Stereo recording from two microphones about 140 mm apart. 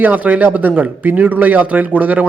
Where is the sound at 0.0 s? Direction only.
10° right (ahead or behind).